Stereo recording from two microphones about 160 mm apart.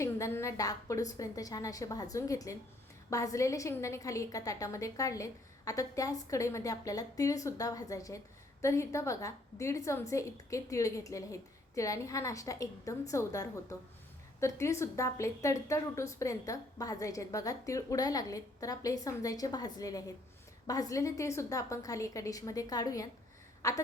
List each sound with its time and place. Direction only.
0.0 s a woman's voice: 15° left (ahead or behind)